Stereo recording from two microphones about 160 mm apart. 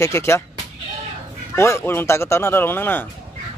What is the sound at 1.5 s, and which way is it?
Speech, 15° left (ahead or behind).